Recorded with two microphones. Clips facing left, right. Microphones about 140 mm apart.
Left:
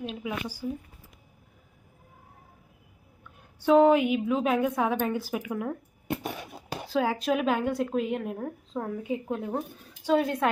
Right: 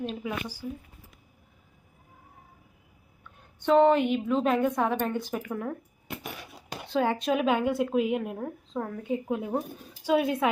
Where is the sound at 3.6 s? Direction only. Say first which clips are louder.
Left 1 dB; 5° left (ahead or behind).